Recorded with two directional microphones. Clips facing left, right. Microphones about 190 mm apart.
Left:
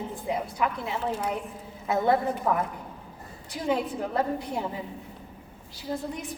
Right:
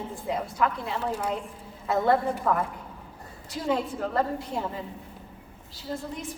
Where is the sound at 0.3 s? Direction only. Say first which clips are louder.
Right 1 dB; 15° left (ahead or behind).